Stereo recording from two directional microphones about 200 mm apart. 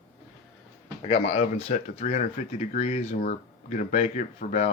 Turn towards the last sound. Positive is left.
turn(degrees=35)  # may be behind; listen again after turning